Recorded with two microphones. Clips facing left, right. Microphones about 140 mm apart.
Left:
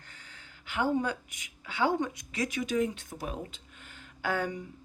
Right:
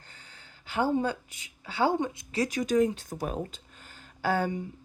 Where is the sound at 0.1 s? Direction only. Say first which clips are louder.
Even; 35° right (ahead or behind).